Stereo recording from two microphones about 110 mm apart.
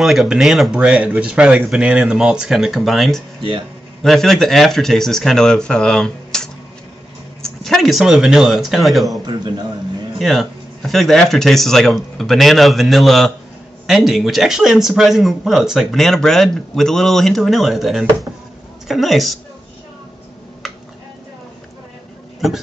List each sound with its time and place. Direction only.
0.0 s a man's voice: centre (ahead or behind)
9.2 s a man's voice: 40° right (ahead or behind)
10.1 s a man's voice: centre (ahead or behind)